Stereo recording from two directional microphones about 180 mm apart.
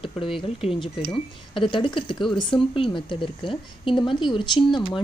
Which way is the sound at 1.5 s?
30° left (ahead or behind).